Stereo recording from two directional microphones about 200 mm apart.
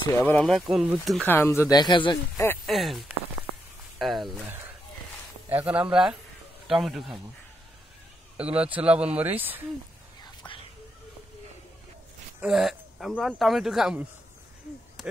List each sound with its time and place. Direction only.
0.2 s speech: 5° left (ahead or behind)
1.2 s speech: 10° left (ahead or behind)
2.6 s speech: centre (ahead or behind)
4.0 s a sound: centre (ahead or behind)
4.5 s a sound: 10° right (ahead or behind)
5.5 s speech: 10° right (ahead or behind)
8.5 s speech: 5° right (ahead or behind)
10.2 s whispering: 25° left (ahead or behind)
12.4 s speech: 5° right (ahead or behind)